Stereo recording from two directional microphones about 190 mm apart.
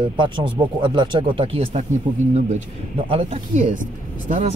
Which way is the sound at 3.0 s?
35° right (ahead or behind).